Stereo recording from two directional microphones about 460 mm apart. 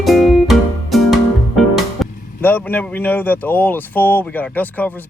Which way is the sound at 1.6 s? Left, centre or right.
Centre.